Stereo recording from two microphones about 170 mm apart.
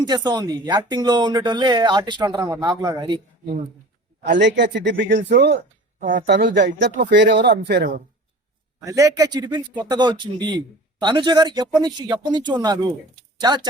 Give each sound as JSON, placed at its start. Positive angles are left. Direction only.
{"t": 0.0, "sound": "speech", "side_deg": -25}
{"t": 4.4, "sound": "speech", "side_deg": -90}
{"t": 6.0, "sound": "speech", "side_deg": -50}
{"t": 6.2, "sound": "speech", "side_deg": -85}
{"t": 8.8, "sound": "speech", "side_deg": -20}